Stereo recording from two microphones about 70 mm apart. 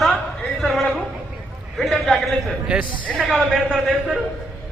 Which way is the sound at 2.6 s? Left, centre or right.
Centre.